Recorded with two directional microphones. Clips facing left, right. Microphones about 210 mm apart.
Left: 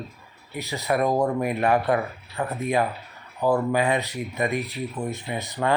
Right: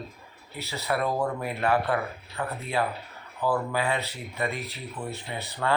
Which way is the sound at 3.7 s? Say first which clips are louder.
Left 5 dB; 15° left (ahead or behind).